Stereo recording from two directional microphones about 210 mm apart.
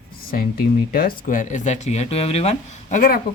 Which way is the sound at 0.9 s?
40° left (ahead or behind).